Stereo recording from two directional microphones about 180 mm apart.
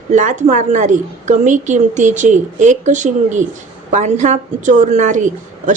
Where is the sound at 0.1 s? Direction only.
45° right (ahead or behind).